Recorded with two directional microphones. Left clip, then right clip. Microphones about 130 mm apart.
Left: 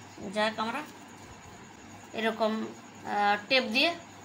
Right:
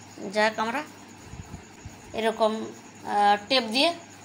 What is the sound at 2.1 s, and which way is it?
A woman's voice, 20° right (ahead or behind).